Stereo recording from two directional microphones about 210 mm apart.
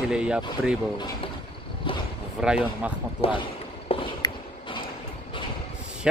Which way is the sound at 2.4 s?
5° right (ahead or behind).